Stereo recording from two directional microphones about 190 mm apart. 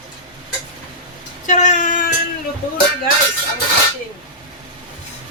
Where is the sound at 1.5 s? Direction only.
40° left (ahead or behind).